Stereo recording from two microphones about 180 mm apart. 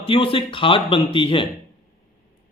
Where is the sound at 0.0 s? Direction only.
30° left (ahead or behind).